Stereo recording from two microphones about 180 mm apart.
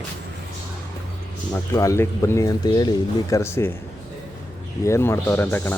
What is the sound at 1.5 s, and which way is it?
Speech, 15° left (ahead or behind).